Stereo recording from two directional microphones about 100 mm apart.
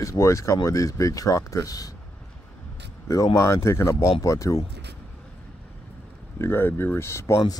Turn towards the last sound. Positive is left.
turn(degrees=30)  # may be behind; listen again after turning